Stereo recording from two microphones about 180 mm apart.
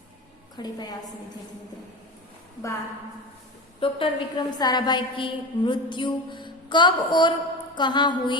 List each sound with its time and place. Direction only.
0.5 s a woman's voice: 20° left (ahead or behind)
3.8 s a woman's voice: 30° left (ahead or behind)